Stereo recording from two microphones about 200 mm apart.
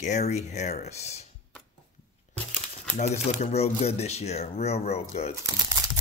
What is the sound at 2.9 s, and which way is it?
Speech, 35° left (ahead or behind).